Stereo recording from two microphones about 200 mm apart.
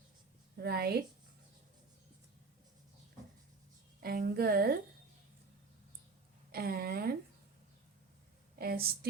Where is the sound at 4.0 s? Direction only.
45° right (ahead or behind).